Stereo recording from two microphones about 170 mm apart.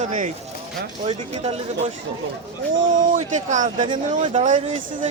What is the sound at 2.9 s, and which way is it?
Speech, 45° right (ahead or behind).